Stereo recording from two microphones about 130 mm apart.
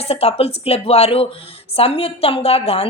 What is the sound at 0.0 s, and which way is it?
Speech, 50° left (ahead or behind).